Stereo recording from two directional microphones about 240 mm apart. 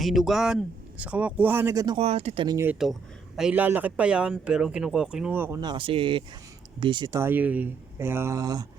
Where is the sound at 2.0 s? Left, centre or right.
Right.